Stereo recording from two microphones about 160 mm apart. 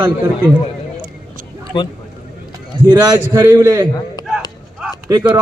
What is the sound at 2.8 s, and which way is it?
Speech, 35° right (ahead or behind).